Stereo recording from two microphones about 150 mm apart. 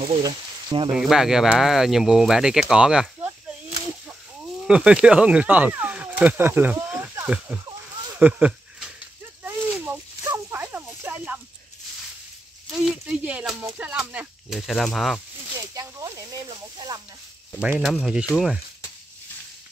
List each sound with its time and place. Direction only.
0.2 s speech: 25° right (ahead or behind)
0.9 s speech: 5° right (ahead or behind)
4.6 s speech: 5° right (ahead or behind)
8.2 s a sound: 10° right (ahead or behind)
13.0 s snake: 10° right (ahead or behind)
15.7 s snake: 20° right (ahead or behind)
17.6 s speech: 5° right (ahead or behind)